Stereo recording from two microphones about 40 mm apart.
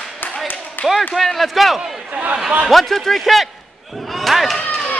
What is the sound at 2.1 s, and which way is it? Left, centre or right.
Speech, right.